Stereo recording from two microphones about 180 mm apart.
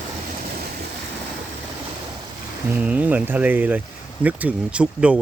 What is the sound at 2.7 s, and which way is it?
Speech, 10° right (ahead or behind).